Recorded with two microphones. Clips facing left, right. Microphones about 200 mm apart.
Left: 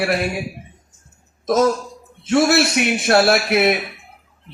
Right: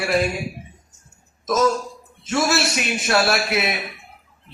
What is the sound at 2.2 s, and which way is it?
A man's voice, 60° left (ahead or behind).